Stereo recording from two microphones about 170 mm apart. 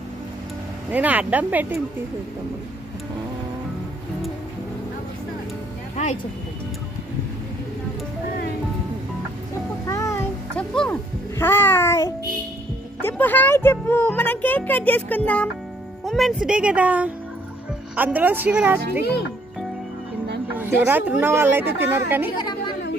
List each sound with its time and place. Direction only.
0.8 s speech: 10° right (ahead or behind)
9.8 s music: 20° left (ahead or behind)
10.5 s music: 5° left (ahead or behind)
11.3 s babbling: 15° left (ahead or behind)
13.0 s a child's voice: 10° left (ahead or behind); by 18.8 s 10° right (ahead or behind)
20.5 s speech: 10° right (ahead or behind)